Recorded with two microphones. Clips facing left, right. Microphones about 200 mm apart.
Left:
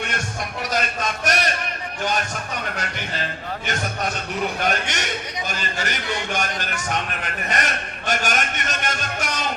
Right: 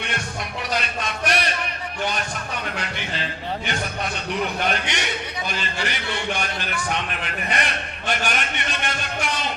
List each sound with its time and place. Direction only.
0.7 s a sound: 45° left (ahead or behind)
2.7 s a man's voice: 45° left (ahead or behind)
4.6 s a man's voice: 45° left (ahead or behind)